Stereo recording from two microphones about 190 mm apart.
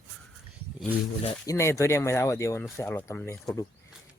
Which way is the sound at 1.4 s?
15° left (ahead or behind).